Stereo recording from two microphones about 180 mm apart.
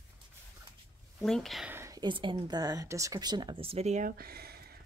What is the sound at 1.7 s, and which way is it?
Speech, 15° right (ahead or behind).